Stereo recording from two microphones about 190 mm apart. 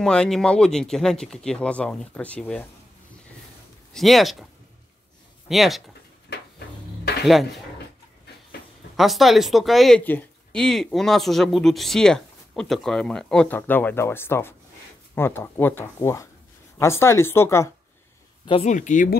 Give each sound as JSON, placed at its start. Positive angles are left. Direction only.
{"t": 0.0, "sound": "speech", "side_deg": 5}
{"t": 3.9, "sound": "speech", "side_deg": 0}
{"t": 5.5, "sound": "speech", "side_deg": 0}
{"t": 7.2, "sound": "speech", "side_deg": 0}
{"t": 8.9, "sound": "speech", "side_deg": 0}
{"t": 18.4, "sound": "speech", "side_deg": 25}
{"t": 18.7, "sound": "speech", "side_deg": 40}